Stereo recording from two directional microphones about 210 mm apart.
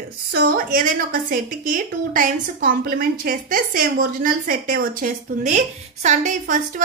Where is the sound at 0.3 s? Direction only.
45° right (ahead or behind).